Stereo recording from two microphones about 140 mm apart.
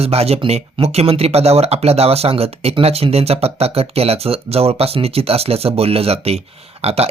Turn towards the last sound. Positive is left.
turn(degrees=-45)  # may be behind; listen again after turning